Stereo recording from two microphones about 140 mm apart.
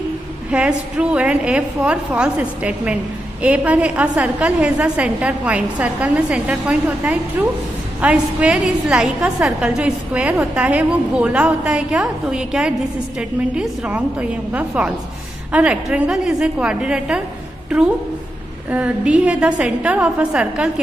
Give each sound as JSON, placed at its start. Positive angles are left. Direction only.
{"t": 0.5, "sound": "a woman's voice", "side_deg": -5}
{"t": 18.7, "sound": "a woman's voice", "side_deg": -10}